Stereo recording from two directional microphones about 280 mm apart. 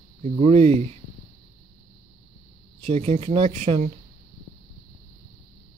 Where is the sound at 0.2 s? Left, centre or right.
Right.